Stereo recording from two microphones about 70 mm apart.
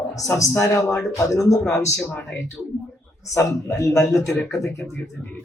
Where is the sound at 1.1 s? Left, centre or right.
Left.